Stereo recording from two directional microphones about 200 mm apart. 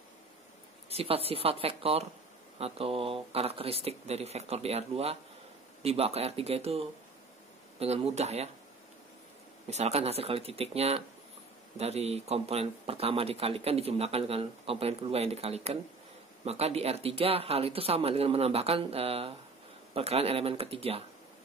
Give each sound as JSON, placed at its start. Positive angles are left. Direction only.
{"t": 0.8, "sound": "speech", "side_deg": -30}
{"t": 9.7, "sound": "speech", "side_deg": -35}